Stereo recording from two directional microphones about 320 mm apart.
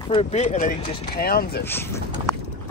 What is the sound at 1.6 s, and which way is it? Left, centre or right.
Speech, centre.